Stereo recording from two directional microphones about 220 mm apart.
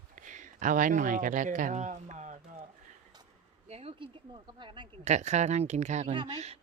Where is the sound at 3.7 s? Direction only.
25° right (ahead or behind).